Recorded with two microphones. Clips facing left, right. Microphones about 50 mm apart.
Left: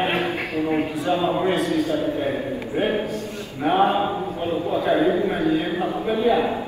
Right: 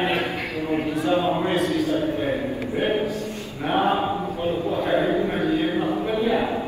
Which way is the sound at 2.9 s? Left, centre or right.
Left.